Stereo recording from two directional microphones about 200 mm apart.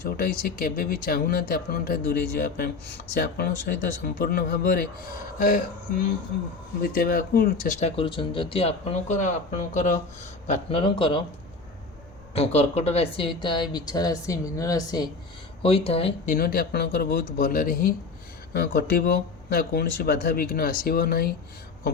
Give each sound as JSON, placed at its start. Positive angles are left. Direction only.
{"t": 0.0, "sound": "a woman's voice", "side_deg": 50}
{"t": 12.3, "sound": "a woman's voice", "side_deg": 30}
{"t": 15.6, "sound": "a woman's voice", "side_deg": 30}
{"t": 16.3, "sound": "speech", "side_deg": 45}